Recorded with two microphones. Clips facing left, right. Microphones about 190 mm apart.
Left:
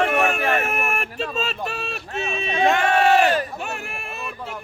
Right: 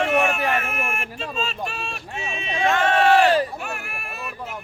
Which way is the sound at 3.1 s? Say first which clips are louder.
Right 1 dB; 30° right (ahead or behind).